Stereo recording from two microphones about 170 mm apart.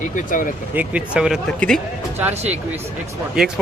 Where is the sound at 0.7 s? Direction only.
5° right (ahead or behind).